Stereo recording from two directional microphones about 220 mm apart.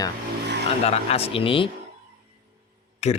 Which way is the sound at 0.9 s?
25° left (ahead or behind).